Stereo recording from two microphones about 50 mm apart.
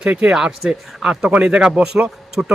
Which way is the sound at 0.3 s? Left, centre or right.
Centre.